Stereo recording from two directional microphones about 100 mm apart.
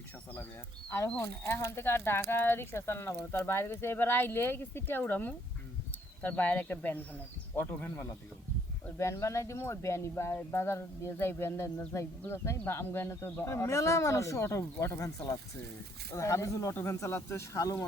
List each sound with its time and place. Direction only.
1.2 s speech: 25° left (ahead or behind)
9.0 s speech: 30° left (ahead or behind)
16.1 s speech: 30° left (ahead or behind)